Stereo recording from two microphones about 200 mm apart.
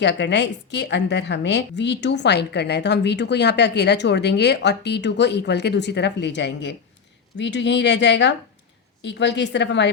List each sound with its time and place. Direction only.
0.0 s a woman's voice: 60° left (ahead or behind)